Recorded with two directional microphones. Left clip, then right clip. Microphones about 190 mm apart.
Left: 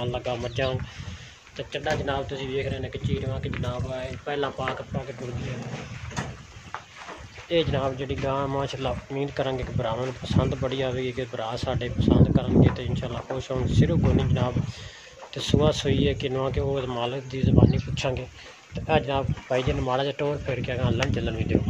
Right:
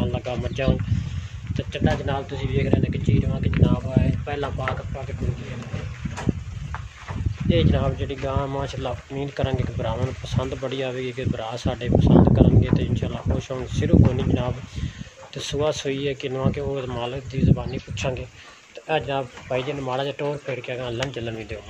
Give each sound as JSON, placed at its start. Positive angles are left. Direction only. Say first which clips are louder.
{"t": 0.0, "sound": "speech", "louder": "right 1 dB", "side_deg": 10}
{"t": 7.4, "sound": "speech", "louder": "right 1 dB", "side_deg": 15}